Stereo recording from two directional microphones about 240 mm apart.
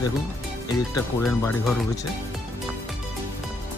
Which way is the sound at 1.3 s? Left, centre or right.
Centre.